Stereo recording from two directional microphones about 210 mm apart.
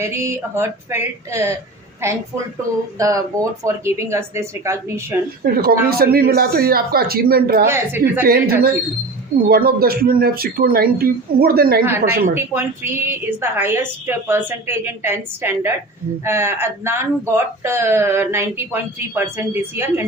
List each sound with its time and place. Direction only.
0.0 s speech: 15° right (ahead or behind)
5.4 s speech: 45° right (ahead or behind)
7.7 s speech: 10° right (ahead or behind)
8.2 s speech: 45° right (ahead or behind)
12.3 s speech: 10° right (ahead or behind)